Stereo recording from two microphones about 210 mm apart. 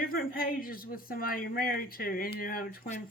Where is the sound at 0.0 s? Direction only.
45° left (ahead or behind).